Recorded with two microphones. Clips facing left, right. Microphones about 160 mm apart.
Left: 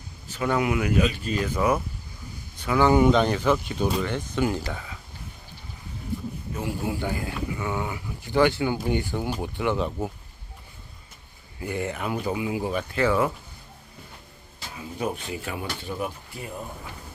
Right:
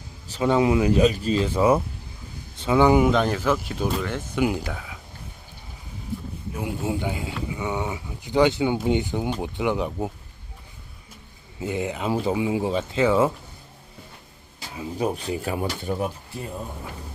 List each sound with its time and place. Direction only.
0.3 s speech: 25° right (ahead or behind); by 4.9 s 5° right (ahead or behind)
6.5 s a man's voice: 15° right (ahead or behind)
11.6 s speech: 20° right (ahead or behind)
14.9 s speech: 35° right (ahead or behind)